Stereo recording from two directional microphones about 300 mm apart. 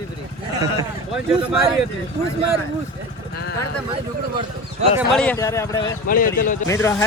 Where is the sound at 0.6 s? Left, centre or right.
Centre.